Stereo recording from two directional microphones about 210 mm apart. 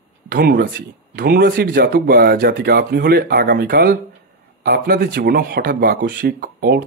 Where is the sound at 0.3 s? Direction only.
45° right (ahead or behind).